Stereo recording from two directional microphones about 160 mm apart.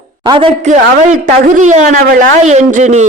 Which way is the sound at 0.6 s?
50° right (ahead or behind).